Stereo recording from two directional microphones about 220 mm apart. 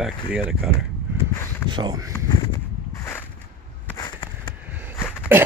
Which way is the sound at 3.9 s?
20° left (ahead or behind).